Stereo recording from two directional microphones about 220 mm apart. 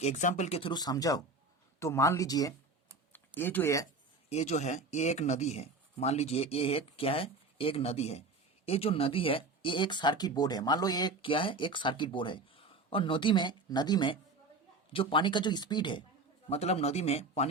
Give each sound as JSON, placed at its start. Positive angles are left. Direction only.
{"t": 0.0, "sound": "speech", "side_deg": 35}
{"t": 4.3, "sound": "speech", "side_deg": 30}